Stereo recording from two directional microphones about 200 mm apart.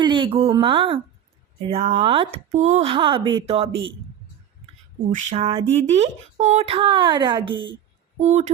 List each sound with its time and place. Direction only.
0.0 s a woman's voice: 25° right (ahead or behind)
5.1 s speech: 30° right (ahead or behind)